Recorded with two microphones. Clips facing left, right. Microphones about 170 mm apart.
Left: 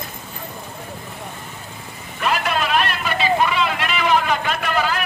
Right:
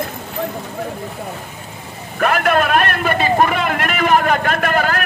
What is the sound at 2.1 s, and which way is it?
Vehicle, 55° right (ahead or behind).